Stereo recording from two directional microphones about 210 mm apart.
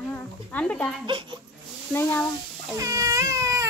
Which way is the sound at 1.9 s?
10° left (ahead or behind).